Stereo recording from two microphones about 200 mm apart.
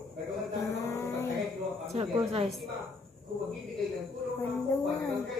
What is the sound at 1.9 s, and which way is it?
Speech, 30° right (ahead or behind).